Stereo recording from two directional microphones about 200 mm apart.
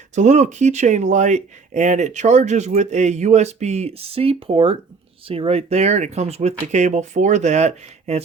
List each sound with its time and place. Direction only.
0.1 s speech: 35° right (ahead or behind)